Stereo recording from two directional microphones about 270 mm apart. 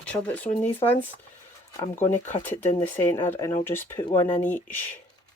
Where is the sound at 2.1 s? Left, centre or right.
Centre.